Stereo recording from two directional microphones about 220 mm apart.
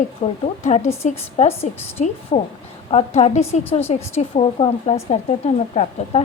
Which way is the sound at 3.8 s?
10° left (ahead or behind).